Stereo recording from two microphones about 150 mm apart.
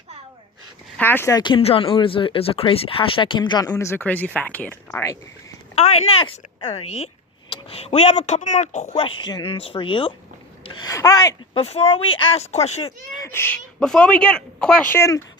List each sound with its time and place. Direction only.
0.9 s speech: 15° left (ahead or behind)
1.3 s speech: 30° left (ahead or behind); by 4.8 s 10° left (ahead or behind)
4.9 s speech: 20° left (ahead or behind)
5.7 s speech: 40° left (ahead or behind)
8.4 s speech: 55° left (ahead or behind)
9.0 s speech: 35° left (ahead or behind)
11.5 s speech: 40° left (ahead or behind)
13.2 s speech: 15° left (ahead or behind)
13.7 s speech: 5° left (ahead or behind)
14.9 s speech: 20° left (ahead or behind)